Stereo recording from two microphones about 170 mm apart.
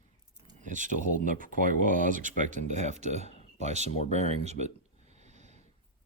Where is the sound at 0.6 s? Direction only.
50° right (ahead or behind).